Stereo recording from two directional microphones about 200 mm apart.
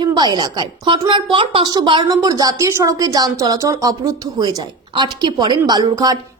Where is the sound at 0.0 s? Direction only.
20° right (ahead or behind).